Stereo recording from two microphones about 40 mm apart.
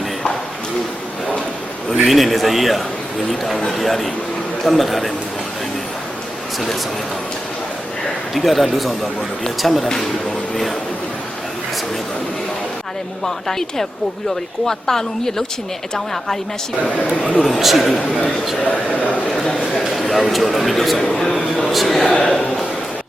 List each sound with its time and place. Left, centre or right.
2.0 s a man's voice: centre
8.3 s a man's voice: centre
13.2 s speech: centre
16.8 s speech: left
17.4 s a man's voice: centre
20.0 s a sound: centre
20.3 s a man's voice: centre
21.2 s speech: left
21.7 s a man's voice: centre
22.1 s speech: left